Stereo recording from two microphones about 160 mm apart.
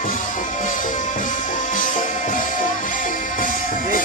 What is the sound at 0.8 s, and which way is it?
Music, 55° left (ahead or behind).